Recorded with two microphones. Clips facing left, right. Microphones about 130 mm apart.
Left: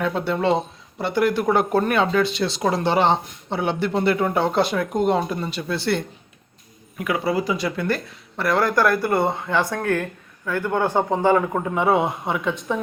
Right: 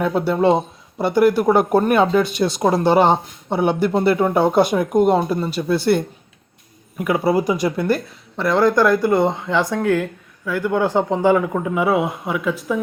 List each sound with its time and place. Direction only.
0.0 s speech: 10° right (ahead or behind)
2.4 s speech: 20° right (ahead or behind)
2.9 s speech: 10° right (ahead or behind)
7.1 s speech: 40° right (ahead or behind)
7.4 s speech: 15° right (ahead or behind)
8.4 s a man's voice: 5° left (ahead or behind)
8.7 s a man's voice: 15° right (ahead or behind)